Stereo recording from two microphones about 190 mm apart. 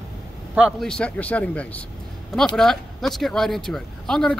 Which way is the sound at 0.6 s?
Centre (ahead or behind).